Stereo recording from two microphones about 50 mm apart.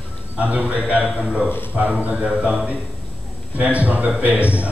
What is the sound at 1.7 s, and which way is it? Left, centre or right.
Speech, right.